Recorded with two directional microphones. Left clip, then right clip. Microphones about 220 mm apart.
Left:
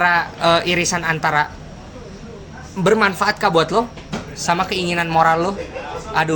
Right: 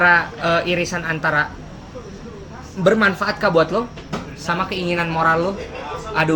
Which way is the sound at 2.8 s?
55° left (ahead or behind).